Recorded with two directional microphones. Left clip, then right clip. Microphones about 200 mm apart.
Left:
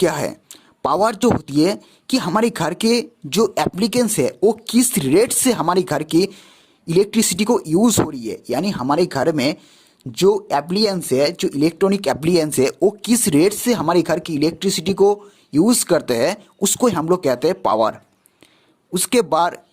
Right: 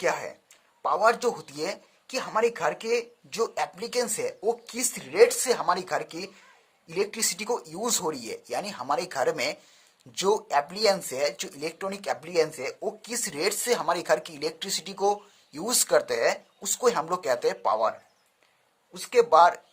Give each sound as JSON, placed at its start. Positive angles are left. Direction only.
{"t": 0.0, "sound": "speech", "side_deg": 45}
{"t": 12.2, "sound": "speech", "side_deg": 45}
{"t": 18.9, "sound": "speech", "side_deg": 50}